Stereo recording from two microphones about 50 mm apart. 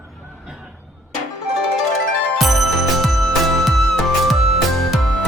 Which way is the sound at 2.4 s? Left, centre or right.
Centre.